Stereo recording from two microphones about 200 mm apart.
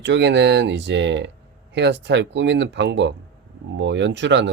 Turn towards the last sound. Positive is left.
turn(degrees=-65)  # may be behind; listen again after turning